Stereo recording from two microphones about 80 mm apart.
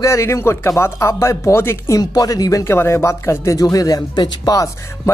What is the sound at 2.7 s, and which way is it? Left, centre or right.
Speech, left.